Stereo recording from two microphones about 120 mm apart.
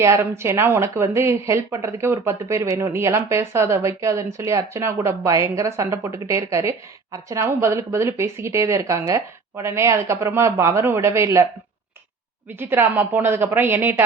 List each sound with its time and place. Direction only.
0.0 s speech: 25° right (ahead or behind)
12.5 s speech: 15° right (ahead or behind)